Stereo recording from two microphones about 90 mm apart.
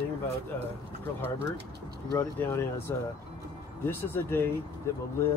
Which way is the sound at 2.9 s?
35° left (ahead or behind).